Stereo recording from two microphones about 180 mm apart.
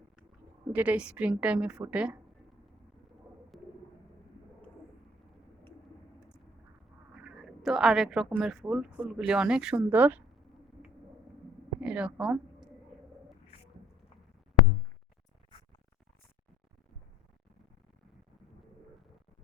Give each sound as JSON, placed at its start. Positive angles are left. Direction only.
{"t": 0.7, "sound": "a woman's voice", "side_deg": -10}
{"t": 3.5, "sound": "bird", "side_deg": 0}
{"t": 7.3, "sound": "a woman's voice", "side_deg": 0}
{"t": 11.8, "sound": "speech", "side_deg": -5}